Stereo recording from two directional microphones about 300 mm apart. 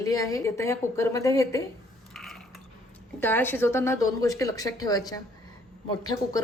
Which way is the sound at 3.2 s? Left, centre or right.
Centre.